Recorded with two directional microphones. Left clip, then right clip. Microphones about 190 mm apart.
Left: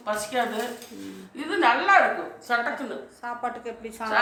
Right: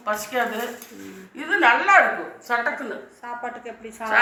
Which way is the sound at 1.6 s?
10° right (ahead or behind).